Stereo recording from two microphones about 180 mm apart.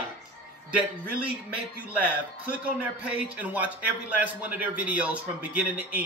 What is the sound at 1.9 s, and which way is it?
A man's voice, 10° right (ahead or behind).